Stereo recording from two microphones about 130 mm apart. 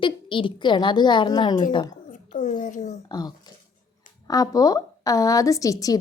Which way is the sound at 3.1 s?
30° left (ahead or behind).